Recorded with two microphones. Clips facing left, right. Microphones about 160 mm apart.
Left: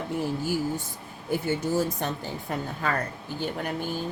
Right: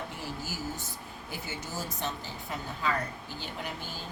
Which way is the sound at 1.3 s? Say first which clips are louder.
Left 14 dB; 55° left (ahead or behind).